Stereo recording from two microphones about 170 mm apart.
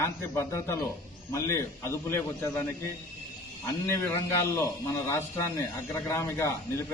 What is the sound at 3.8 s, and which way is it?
A man's voice, 15° left (ahead or behind).